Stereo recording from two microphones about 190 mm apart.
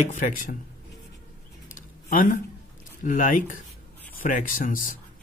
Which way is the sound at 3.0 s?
45° left (ahead or behind).